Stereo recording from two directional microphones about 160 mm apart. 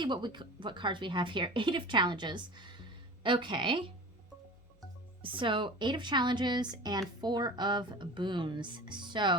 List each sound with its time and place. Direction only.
0.0 s speech: 30° right (ahead or behind)
5.2 s speech: 30° right (ahead or behind)